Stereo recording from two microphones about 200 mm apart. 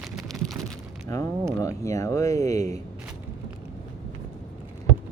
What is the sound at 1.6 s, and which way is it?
Speech, 15° left (ahead or behind).